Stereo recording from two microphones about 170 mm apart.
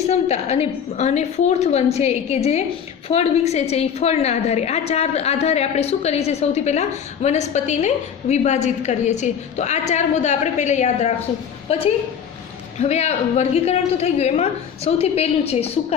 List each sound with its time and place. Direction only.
0.1 s a woman's voice: 40° left (ahead or behind)
12.8 s a woman's voice: 40° left (ahead or behind)